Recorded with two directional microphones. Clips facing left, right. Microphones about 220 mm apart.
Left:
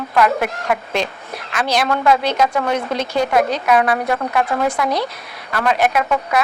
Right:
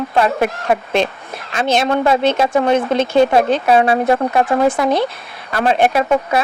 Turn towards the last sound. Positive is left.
turn(degrees=-30)  # may be behind; listen again after turning